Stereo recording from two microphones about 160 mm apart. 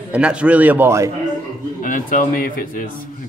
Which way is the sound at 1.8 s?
55° left (ahead or behind).